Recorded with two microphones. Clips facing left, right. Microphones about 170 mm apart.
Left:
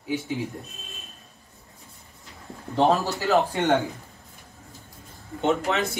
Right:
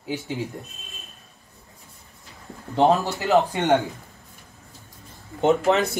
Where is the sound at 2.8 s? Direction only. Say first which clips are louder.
Right 2 dB; 20° right (ahead or behind).